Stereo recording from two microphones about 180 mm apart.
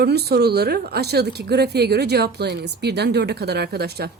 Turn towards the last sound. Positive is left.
turn(degrees=-60)  # may be behind; listen again after turning